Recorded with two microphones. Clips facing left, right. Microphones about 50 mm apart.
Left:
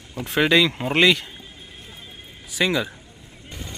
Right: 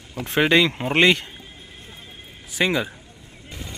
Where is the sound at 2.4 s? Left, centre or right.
Right.